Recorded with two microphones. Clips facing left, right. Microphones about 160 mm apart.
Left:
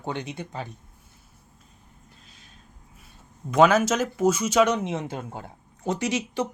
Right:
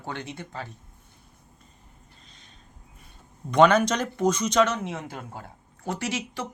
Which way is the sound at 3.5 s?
5° left (ahead or behind).